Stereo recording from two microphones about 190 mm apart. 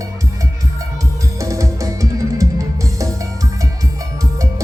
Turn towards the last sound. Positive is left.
turn(degrees=-15)  # may be behind; listen again after turning